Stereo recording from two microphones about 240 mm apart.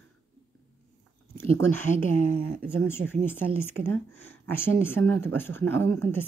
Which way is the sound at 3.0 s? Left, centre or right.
Right.